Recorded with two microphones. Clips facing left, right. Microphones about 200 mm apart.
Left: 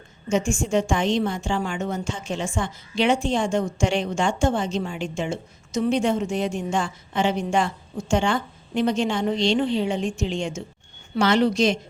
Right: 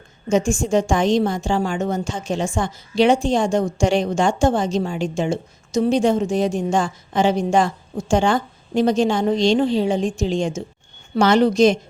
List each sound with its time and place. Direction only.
0.3 s a woman's voice: 40° right (ahead or behind)